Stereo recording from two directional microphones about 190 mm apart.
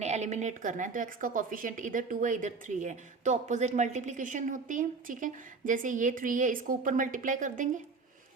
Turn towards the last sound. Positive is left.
turn(degrees=-45)  # may be behind; listen again after turning